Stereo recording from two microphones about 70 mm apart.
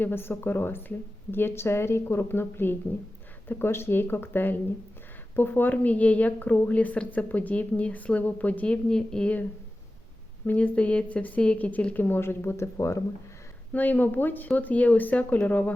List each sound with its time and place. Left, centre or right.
0.0 s a woman's voice: left; by 9.3 s centre
10.4 s a woman's voice: left
13.7 s a woman's voice: left